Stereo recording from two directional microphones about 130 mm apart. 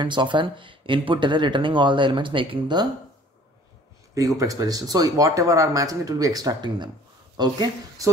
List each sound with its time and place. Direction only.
0.0 s speech: 35° right (ahead or behind)
4.1 s speech: 25° right (ahead or behind)